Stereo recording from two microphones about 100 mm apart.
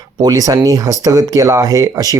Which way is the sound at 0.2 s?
40° right (ahead or behind).